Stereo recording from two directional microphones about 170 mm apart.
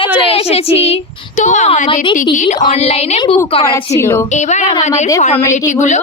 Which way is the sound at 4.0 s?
15° left (ahead or behind).